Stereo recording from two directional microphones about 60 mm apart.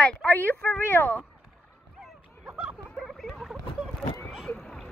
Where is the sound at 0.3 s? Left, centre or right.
Left.